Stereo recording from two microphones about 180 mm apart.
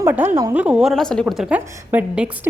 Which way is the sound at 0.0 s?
10° right (ahead or behind).